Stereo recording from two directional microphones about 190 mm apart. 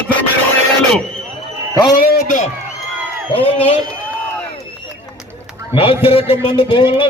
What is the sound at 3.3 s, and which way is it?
Speech, 30° left (ahead or behind).